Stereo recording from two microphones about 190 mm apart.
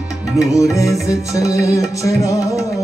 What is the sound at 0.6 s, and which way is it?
Music, 15° left (ahead or behind).